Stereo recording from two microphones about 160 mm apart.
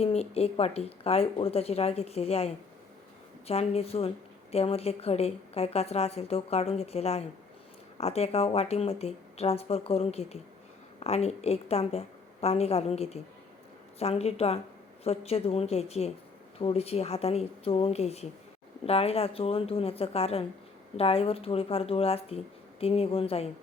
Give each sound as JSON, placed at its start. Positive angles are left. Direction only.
{"t": 0.0, "sound": "a woman's voice", "side_deg": 40}